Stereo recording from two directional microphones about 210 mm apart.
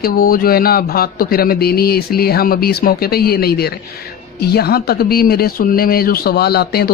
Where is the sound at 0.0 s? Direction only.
45° left (ahead or behind).